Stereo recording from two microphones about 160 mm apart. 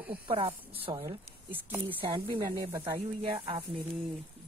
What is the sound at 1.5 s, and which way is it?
Speech, 10° right (ahead or behind).